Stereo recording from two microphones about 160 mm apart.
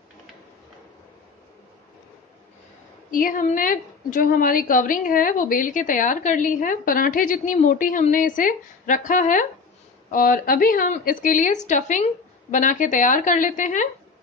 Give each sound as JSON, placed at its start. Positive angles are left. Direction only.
{"t": 3.1, "sound": "a woman's voice", "side_deg": 60}